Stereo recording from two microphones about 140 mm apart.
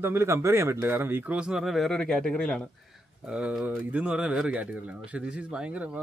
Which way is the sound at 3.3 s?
10° right (ahead or behind).